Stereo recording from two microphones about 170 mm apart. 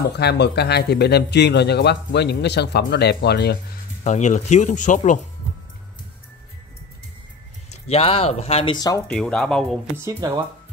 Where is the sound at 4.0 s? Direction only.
45° left (ahead or behind).